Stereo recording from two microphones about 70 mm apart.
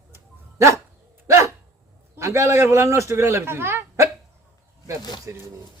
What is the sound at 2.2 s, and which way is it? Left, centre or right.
Speech, right.